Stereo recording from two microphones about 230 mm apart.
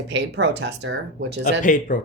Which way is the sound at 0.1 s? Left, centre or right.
Right.